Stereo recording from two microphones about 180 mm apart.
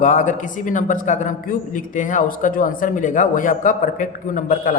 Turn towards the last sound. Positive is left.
turn(degrees=45)  # may be behind; listen again after turning